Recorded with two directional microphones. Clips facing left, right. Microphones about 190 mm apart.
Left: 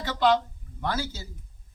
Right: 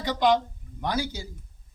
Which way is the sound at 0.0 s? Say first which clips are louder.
Right 1 dB; 15° right (ahead or behind).